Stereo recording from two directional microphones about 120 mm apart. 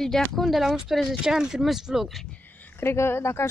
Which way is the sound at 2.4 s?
15° left (ahead or behind).